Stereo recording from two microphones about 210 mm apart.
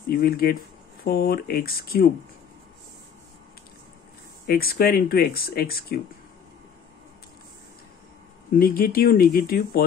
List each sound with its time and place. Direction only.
0.1 s speech: 45° left (ahead or behind)
4.5 s speech: 45° left (ahead or behind)
8.5 s speech: 45° left (ahead or behind)